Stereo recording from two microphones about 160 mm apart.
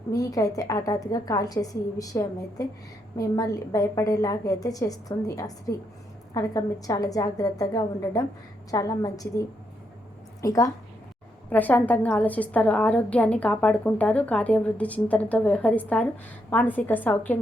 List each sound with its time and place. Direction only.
0.1 s a woman's voice: 20° left (ahead or behind)
10.4 s a woman's voice: 20° left (ahead or behind)
11.4 s a woman's voice: 10° left (ahead or behind)